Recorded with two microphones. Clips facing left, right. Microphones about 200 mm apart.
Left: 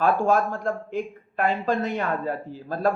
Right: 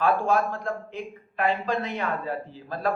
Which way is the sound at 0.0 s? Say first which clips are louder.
Left 2 dB; 45° left (ahead or behind).